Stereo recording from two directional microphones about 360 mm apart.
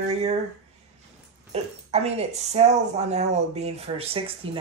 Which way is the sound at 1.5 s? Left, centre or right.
Centre.